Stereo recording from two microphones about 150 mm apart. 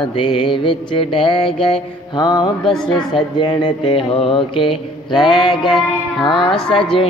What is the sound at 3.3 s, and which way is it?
Mantra, 30° left (ahead or behind).